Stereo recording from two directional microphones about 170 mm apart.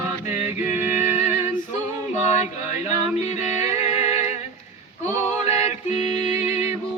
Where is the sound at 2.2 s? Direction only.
40° left (ahead or behind).